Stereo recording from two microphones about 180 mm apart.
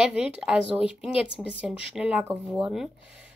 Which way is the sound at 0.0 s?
5° right (ahead or behind).